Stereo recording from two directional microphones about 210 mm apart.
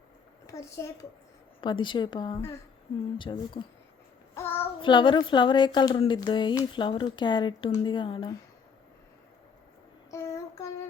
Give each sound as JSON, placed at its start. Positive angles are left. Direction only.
{"t": 0.4, "sound": "a woman's voice", "side_deg": 15}
{"t": 4.4, "sound": "child singing", "side_deg": 10}
{"t": 4.8, "sound": "a woman's voice", "side_deg": 25}
{"t": 10.1, "sound": "child singing", "side_deg": 15}